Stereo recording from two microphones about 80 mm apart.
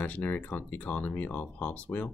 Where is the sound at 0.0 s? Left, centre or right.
Centre.